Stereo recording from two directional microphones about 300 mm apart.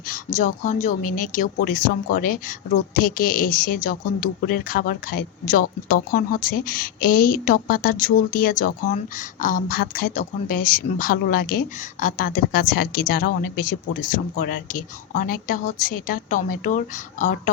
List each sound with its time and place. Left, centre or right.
0.3 s a woman's voice: left